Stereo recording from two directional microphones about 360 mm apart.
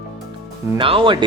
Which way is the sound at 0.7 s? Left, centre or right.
Centre.